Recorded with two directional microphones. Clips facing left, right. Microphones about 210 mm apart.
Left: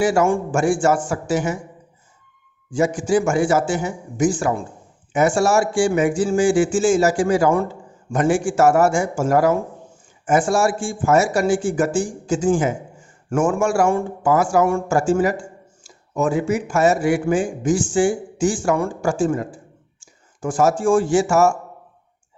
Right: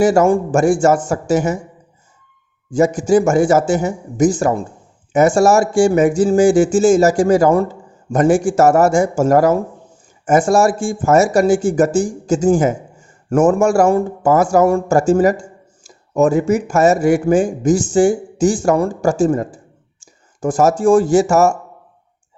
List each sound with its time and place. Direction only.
0.0 s a man's voice: 40° right (ahead or behind)
2.7 s a man's voice: 40° right (ahead or behind)